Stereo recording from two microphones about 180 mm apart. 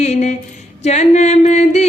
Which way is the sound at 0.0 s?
40° left (ahead or behind).